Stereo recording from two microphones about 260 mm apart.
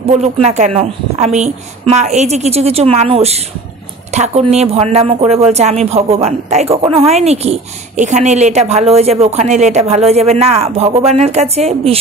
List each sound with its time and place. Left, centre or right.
0.2 s speech: right